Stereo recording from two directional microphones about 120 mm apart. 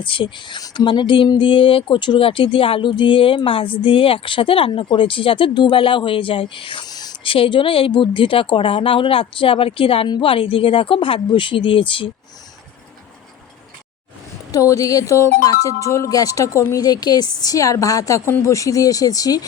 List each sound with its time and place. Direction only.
0.0 s speech: 45° left (ahead or behind)
7.3 s speech: 45° left (ahead or behind)
14.5 s speech: 30° left (ahead or behind)